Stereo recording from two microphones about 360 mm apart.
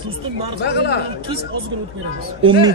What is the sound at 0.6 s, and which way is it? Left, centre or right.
Speech, left.